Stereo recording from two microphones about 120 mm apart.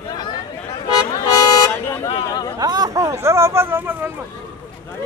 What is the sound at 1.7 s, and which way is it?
Speech, 15° left (ahead or behind).